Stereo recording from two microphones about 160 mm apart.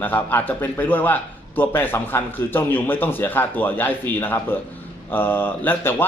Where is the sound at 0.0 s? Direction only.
10° left (ahead or behind).